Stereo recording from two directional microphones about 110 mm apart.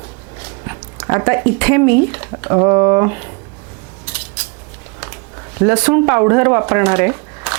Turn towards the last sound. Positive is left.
turn(degrees=-25)  # may be behind; listen again after turning